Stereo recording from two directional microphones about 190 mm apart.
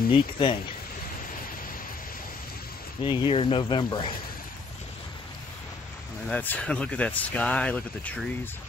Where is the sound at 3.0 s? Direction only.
25° left (ahead or behind).